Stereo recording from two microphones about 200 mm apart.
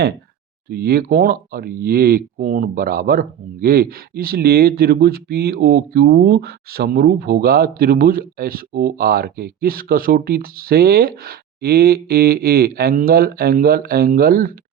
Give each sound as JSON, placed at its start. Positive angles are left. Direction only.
{"t": 0.7, "sound": "speech", "side_deg": -50}